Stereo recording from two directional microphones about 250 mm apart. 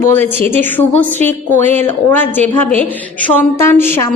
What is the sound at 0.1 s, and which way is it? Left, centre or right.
A woman's voice, centre.